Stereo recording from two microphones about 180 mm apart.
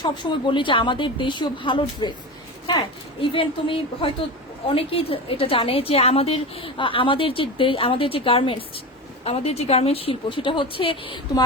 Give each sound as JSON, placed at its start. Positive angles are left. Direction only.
{"t": 0.0, "sound": "a woman's voice", "side_deg": 25}
{"t": 3.2, "sound": "a woman's voice", "side_deg": 30}